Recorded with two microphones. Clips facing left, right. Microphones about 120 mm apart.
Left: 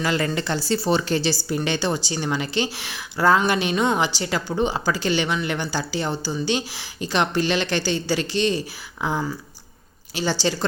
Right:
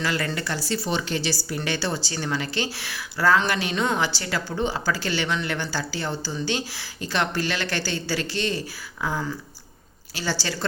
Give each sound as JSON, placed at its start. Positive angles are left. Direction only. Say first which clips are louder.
{"t": 0.0, "sound": "speech", "louder": "left 4 dB", "side_deg": 20}
{"t": 1.5, "sound": "speech", "louder": "left 4 dB", "side_deg": 20}